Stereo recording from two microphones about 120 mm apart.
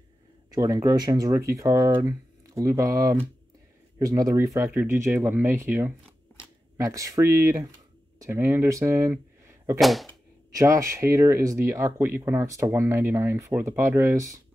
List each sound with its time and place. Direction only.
0.6 s speech: 30° right (ahead or behind)
6.8 s speech: 25° right (ahead or behind)
9.8 s speech: centre (ahead or behind)
10.5 s speech: 25° right (ahead or behind)